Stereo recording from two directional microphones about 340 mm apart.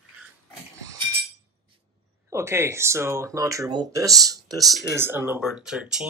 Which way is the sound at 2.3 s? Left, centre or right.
Centre.